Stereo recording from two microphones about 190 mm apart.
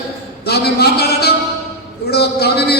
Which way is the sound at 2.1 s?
60° left (ahead or behind).